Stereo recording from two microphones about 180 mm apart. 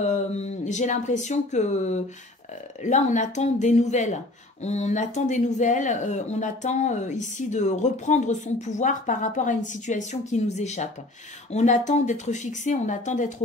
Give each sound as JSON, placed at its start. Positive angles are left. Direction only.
{"t": 0.0, "sound": "speech", "side_deg": 40}